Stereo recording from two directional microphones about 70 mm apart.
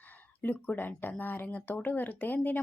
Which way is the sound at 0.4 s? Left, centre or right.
Left.